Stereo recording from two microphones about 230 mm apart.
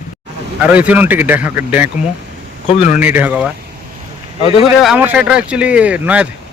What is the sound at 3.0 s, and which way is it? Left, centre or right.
Speech, centre.